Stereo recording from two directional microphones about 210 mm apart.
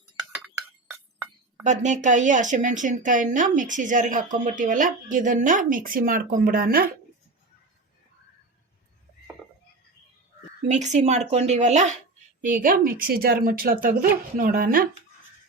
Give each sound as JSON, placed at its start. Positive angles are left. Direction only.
{"t": 0.4, "sound": "chink", "side_deg": -5}
{"t": 1.6, "sound": "speech", "side_deg": -35}
{"t": 10.7, "sound": "a woman's voice", "side_deg": -35}